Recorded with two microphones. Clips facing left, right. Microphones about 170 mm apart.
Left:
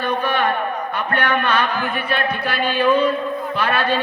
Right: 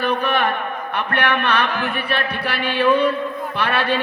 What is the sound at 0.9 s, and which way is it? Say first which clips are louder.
A man's voice: right 1 dB; 65° right (ahead or behind).